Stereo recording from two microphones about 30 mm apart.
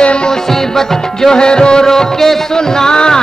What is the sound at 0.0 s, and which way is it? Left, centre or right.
Music, left.